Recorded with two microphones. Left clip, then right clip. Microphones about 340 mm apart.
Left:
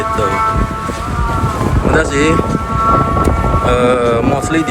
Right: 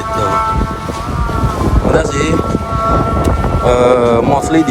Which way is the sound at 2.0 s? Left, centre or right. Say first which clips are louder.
Left 2 dB; centre.